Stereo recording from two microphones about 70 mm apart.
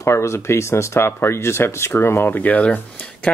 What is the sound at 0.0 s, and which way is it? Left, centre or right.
Speech, left.